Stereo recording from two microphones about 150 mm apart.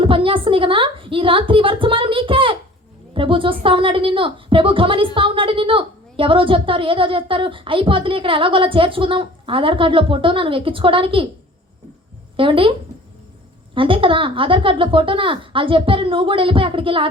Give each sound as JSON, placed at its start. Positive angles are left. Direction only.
{"t": 0.0, "sound": "a sound", "side_deg": -35}
{"t": 3.2, "sound": "a woman's voice", "side_deg": -35}
{"t": 12.4, "sound": "a woman's voice", "side_deg": -35}
{"t": 13.7, "sound": "a woman's voice", "side_deg": -35}